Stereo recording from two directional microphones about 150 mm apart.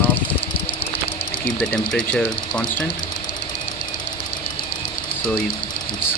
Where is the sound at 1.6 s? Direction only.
5° left (ahead or behind).